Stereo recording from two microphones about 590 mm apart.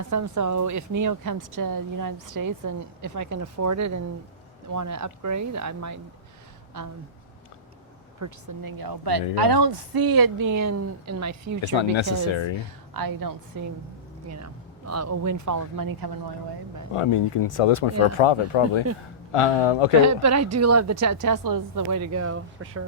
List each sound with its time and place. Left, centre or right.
0.1 s a woman's voice: right
8.2 s a woman's voice: right
11.6 s speech: left
12.9 s a woman's voice: right
16.9 s speech: left
20.0 s a woman's voice: right